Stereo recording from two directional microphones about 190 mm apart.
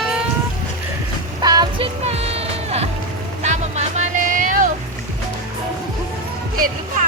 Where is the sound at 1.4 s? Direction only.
20° right (ahead or behind).